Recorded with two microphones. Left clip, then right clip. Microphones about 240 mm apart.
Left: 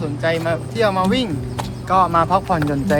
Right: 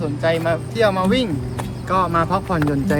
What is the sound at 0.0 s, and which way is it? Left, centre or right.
Speech, centre.